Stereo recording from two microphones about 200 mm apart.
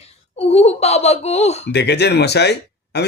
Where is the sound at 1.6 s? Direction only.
55° left (ahead or behind).